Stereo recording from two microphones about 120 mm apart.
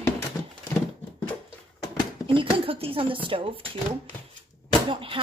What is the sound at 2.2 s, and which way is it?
Speech, 50° right (ahead or behind).